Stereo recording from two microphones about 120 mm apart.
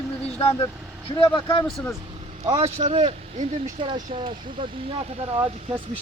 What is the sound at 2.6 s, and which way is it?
Speech, 70° right (ahead or behind).